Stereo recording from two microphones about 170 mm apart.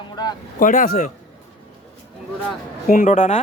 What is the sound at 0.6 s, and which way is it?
Speech, 50° left (ahead or behind).